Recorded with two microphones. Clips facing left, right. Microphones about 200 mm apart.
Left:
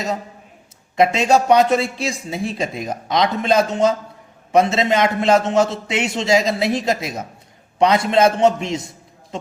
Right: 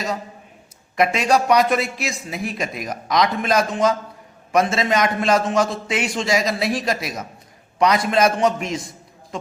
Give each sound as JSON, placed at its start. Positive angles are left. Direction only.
{"t": 0.9, "sound": "a man's voice", "side_deg": 25}